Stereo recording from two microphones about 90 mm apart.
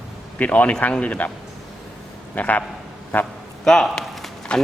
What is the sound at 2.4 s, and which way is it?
Speech, 15° left (ahead or behind).